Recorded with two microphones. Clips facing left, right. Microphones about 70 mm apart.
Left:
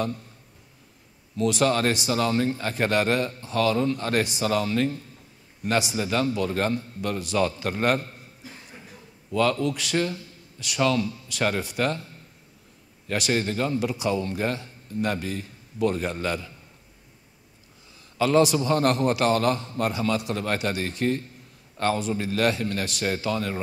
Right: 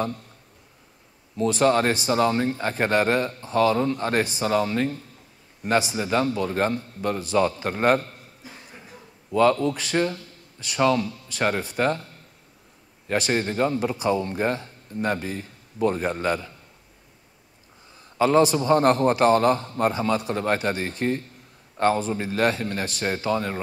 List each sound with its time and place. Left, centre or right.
1.3 s a man's voice: right
9.3 s a man's voice: right
18.1 s a man's voice: right